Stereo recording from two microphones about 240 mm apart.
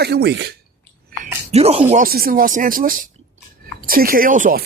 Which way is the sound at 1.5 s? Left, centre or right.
Right.